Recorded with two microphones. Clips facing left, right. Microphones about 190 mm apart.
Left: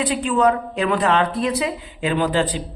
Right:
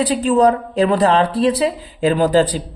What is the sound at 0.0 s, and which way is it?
Speech, 35° right (ahead or behind).